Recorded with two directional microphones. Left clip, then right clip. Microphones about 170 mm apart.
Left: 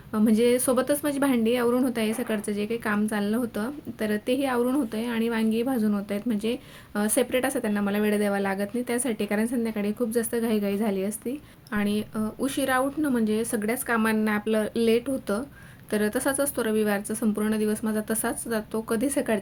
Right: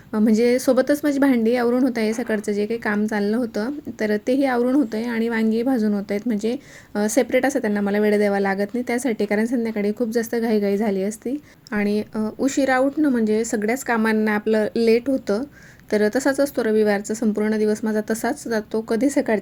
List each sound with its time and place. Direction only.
0.1 s a woman's voice: 25° right (ahead or behind)